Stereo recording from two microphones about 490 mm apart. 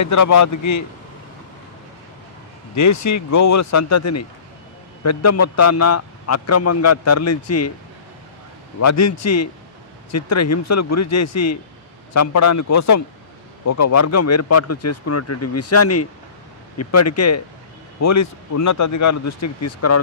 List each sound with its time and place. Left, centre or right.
0.0 s a man's voice: left
2.7 s a man's voice: left
8.7 s a man's voice: left